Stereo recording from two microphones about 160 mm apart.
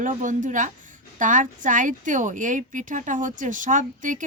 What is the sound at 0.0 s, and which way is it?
A woman's voice, 55° right (ahead or behind).